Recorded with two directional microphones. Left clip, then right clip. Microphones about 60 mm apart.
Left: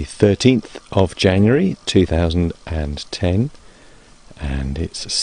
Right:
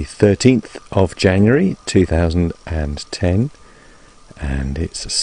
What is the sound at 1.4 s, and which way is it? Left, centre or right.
Speech, centre.